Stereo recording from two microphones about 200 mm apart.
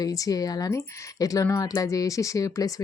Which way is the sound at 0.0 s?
15° left (ahead or behind).